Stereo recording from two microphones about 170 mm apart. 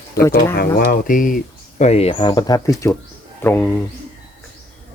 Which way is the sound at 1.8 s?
40° left (ahead or behind).